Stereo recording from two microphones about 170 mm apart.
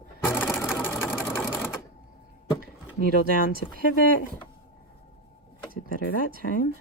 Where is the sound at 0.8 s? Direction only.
15° left (ahead or behind).